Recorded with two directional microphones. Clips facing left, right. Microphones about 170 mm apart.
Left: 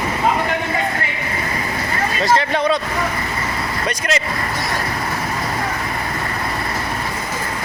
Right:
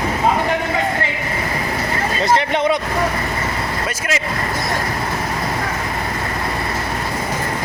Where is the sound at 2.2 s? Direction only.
20° right (ahead or behind).